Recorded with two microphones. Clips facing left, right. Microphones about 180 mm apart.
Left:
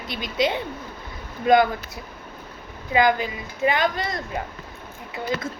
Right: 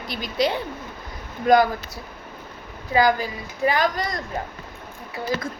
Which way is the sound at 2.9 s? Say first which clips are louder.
Even; 20° left (ahead or behind).